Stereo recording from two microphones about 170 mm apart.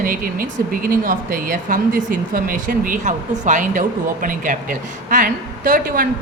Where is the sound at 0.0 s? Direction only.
55° right (ahead or behind).